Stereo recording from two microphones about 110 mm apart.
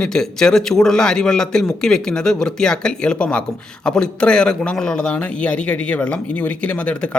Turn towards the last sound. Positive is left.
turn(degrees=10)  # may be behind; listen again after turning